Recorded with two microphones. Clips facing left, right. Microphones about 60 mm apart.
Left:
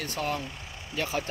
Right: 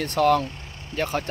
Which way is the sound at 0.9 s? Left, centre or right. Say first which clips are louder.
Right 4 dB; right.